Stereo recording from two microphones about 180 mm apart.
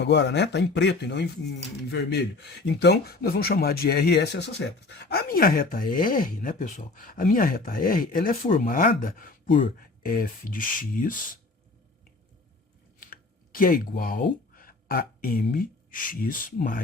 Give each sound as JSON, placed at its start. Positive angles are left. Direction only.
{"t": 0.0, "sound": "speech", "side_deg": 70}
{"t": 13.0, "sound": "speech", "side_deg": 50}